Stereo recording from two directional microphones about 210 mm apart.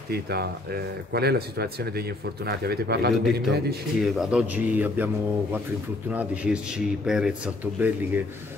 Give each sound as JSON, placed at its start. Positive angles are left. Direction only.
{"t": 0.1, "sound": "speech", "side_deg": -50}
{"t": 4.0, "sound": "speech", "side_deg": 0}